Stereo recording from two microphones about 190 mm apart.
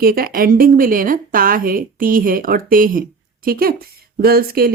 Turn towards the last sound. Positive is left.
turn(degrees=-50)  # may be behind; listen again after turning